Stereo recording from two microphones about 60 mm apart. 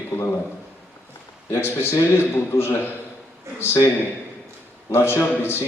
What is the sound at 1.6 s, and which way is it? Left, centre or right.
A man's voice, left.